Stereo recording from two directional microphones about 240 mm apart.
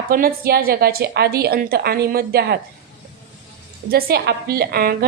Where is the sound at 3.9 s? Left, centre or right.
Right.